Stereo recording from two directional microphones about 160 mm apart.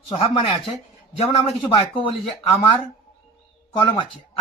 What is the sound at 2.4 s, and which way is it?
Speech, 20° left (ahead or behind).